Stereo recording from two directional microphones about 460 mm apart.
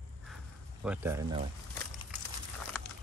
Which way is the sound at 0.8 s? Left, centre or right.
Centre.